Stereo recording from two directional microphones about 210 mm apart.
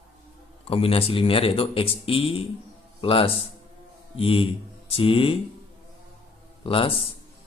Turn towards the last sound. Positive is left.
turn(degrees=25)  # may be behind; listen again after turning